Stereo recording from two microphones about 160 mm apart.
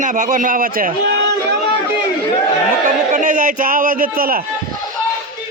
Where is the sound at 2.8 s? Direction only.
50° right (ahead or behind).